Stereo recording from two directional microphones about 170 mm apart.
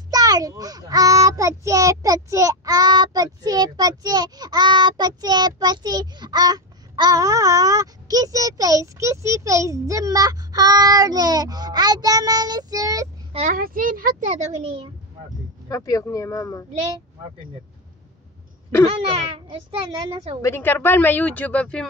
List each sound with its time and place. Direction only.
0.1 s a child's voice: 20° right (ahead or behind)
13.3 s a child's voice: 40° right (ahead or behind)
13.6 s a child's voice: 55° right (ahead or behind); by 14.8 s 40° right (ahead or behind)
15.7 s speech: 20° left (ahead or behind)
18.9 s a child's voice: 30° right (ahead or behind)
20.4 s a woman's voice: 15° left (ahead or behind)